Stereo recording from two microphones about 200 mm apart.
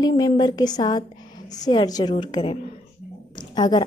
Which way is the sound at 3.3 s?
20° left (ahead or behind).